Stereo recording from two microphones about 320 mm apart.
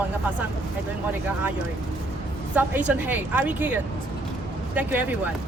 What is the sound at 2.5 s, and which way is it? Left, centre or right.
A woman's voice, centre.